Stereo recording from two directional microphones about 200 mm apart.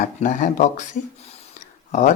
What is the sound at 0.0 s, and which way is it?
Speech, 40° left (ahead or behind).